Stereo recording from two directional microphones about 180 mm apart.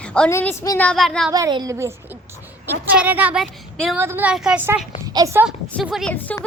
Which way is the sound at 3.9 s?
10° right (ahead or behind).